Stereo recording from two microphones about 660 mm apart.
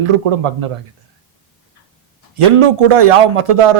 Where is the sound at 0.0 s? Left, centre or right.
Right.